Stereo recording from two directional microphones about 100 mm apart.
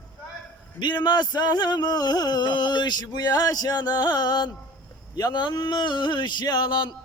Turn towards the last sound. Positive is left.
turn(degrees=50)  # may be behind; listen again after turning